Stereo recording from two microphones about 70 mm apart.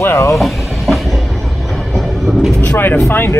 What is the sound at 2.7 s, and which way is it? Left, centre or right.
Speech, left.